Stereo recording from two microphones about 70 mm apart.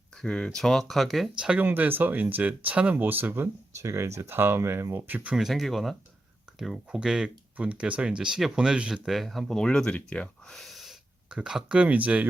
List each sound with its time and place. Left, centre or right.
0.2 s speech: centre
1.5 s speech: right
2.9 s speech: right
3.8 s speech: right
5.0 s speech: right
5.3 s speech: centre
9.0 s speech: centre
10.5 s gasp: centre
11.3 s speech: centre